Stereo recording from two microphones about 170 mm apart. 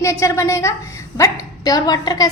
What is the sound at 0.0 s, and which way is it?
A woman's voice, 15° left (ahead or behind).